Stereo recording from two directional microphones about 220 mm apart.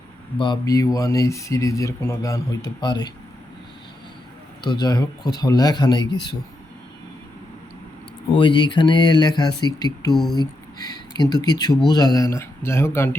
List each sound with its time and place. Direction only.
0.3 s speech: 20° left (ahead or behind)
4.6 s speech: 20° left (ahead or behind)
8.4 s speech: 20° left (ahead or behind)